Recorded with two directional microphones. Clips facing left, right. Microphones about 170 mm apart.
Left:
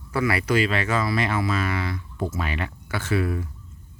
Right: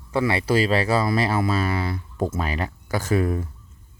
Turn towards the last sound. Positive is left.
turn(degrees=-40)  # may be behind; listen again after turning